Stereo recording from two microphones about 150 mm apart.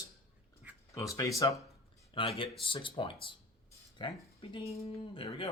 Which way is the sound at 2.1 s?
35° left (ahead or behind).